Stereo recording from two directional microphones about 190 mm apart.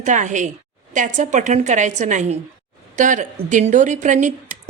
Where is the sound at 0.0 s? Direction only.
40° right (ahead or behind).